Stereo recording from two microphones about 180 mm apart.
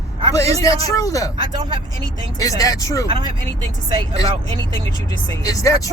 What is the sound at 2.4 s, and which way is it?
Speech, 20° left (ahead or behind).